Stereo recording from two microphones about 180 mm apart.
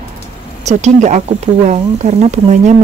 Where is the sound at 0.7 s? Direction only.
40° right (ahead or behind).